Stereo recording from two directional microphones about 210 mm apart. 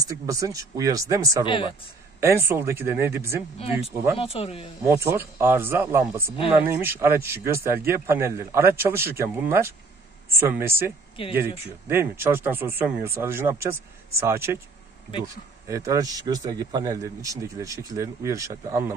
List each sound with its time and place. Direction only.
0.1 s a man's voice: 15° right (ahead or behind)
1.4 s speech: 25° left (ahead or behind)
2.1 s a man's voice: 10° right (ahead or behind)
3.5 s speech: 25° left (ahead or behind)
3.9 s a man's voice: 10° right (ahead or behind)
4.2 s speech: 30° left (ahead or behind)
4.8 s a man's voice: 10° right (ahead or behind)